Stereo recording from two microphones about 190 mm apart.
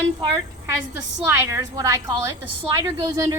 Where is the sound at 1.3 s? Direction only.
15° right (ahead or behind).